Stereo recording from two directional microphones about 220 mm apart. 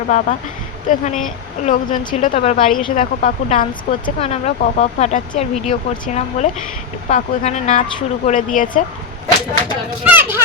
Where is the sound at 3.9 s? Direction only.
25° left (ahead or behind).